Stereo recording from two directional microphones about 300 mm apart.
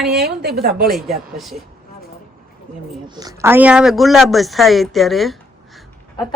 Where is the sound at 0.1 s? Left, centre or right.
Right.